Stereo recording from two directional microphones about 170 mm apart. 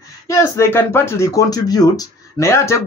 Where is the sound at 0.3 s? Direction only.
15° left (ahead or behind).